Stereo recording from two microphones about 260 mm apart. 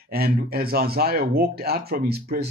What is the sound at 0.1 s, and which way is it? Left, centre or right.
Speech, right.